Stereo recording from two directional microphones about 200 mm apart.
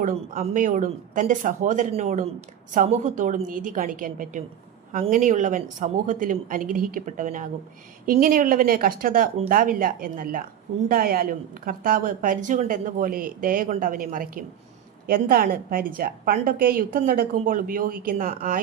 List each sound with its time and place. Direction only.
0.0 s a woman's voice: 40° right (ahead or behind)